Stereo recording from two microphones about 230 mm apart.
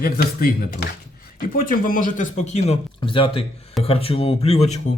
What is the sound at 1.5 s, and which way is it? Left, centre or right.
Speech, left.